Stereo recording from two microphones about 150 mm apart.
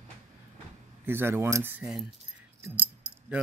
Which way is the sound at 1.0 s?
15° right (ahead or behind).